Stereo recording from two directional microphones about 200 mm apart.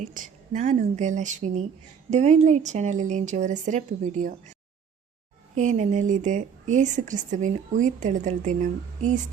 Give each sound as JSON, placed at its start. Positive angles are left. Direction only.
{"t": 0.0, "sound": "speech", "side_deg": -40}
{"t": 5.5, "sound": "speech", "side_deg": -35}